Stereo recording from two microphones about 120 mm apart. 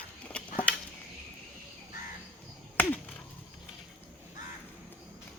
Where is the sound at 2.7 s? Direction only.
15° left (ahead or behind).